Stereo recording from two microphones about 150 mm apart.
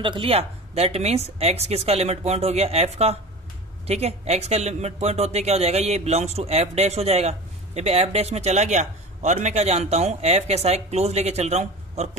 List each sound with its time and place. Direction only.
0.0 s speech: 35° right (ahead or behind)